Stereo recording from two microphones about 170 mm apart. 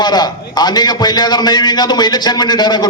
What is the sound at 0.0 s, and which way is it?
A man's voice, 25° left (ahead or behind).